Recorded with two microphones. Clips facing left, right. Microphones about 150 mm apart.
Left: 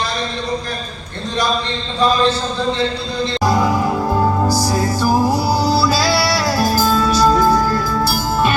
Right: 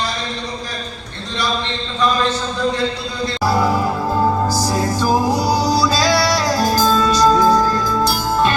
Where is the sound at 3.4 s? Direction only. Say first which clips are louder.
Even; 15° left (ahead or behind).